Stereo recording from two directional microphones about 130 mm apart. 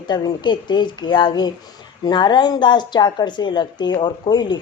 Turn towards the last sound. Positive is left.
turn(degrees=35)  # may be behind; listen again after turning